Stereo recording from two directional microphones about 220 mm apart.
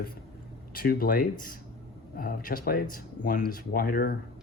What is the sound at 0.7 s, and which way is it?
Speech, 40° left (ahead or behind).